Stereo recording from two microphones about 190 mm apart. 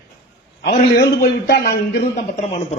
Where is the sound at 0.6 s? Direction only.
55° left (ahead or behind).